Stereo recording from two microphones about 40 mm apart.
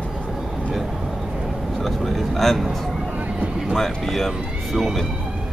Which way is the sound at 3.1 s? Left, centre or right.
Right.